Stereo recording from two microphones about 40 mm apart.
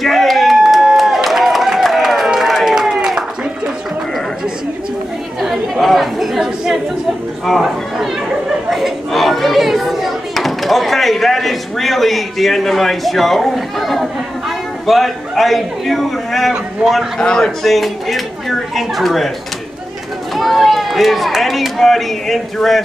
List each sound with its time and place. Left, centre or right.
0.0 s a sound: centre
5.4 s chatter: centre
6.4 s chatter: centre
7.5 s speech: centre
17.2 s speech: centre
17.6 s speech: centre
20.3 s speech: centre